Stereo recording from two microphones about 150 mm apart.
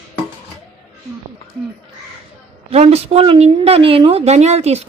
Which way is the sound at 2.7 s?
45° right (ahead or behind).